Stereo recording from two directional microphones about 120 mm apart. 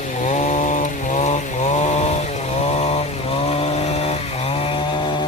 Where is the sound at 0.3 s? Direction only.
85° left.